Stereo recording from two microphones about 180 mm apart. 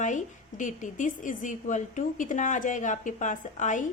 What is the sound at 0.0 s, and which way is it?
A woman's voice, 45° left (ahead or behind).